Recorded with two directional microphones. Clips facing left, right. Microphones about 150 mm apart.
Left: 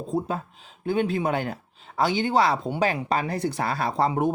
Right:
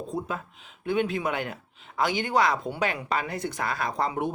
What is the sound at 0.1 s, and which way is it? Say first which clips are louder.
Speech: left 8 dB; 35° left (ahead or behind).